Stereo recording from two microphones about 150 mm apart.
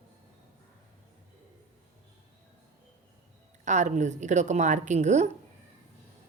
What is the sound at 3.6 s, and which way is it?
Speech, 50° right (ahead or behind).